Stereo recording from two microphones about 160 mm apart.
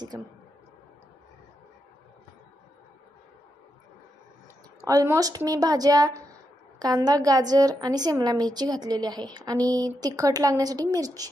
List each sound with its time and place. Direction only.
4.8 s a woman's voice: 20° right (ahead or behind)